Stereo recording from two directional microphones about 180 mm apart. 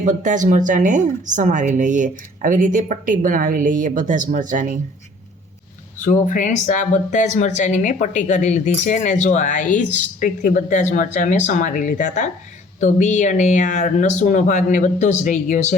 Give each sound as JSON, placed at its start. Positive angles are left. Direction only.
{"t": 0.0, "sound": "a woman's voice", "side_deg": -45}
{"t": 6.0, "sound": "speech", "side_deg": 45}